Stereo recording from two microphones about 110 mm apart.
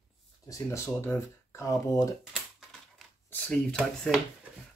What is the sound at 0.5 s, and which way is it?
Speech, 25° left (ahead or behind).